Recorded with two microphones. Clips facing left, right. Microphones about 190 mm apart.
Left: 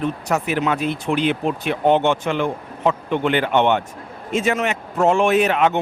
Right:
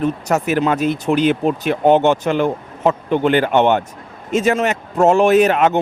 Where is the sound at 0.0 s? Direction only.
40° right (ahead or behind).